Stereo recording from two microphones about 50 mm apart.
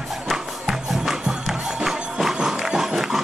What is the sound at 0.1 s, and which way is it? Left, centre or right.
Music, centre.